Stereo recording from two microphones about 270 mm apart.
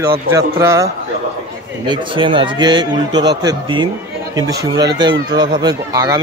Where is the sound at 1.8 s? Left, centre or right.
Centre.